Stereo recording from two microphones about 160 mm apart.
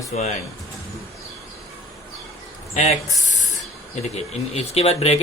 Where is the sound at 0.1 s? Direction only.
50° left (ahead or behind).